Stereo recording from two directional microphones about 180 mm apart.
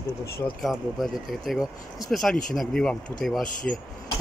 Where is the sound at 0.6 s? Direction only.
Centre (ahead or behind).